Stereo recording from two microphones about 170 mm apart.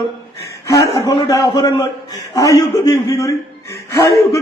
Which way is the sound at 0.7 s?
20° left (ahead or behind).